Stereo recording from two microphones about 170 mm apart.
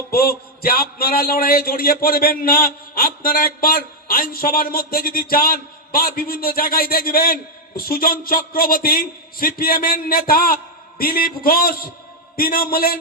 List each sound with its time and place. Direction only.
0.1 s a man's voice: 60° left (ahead or behind)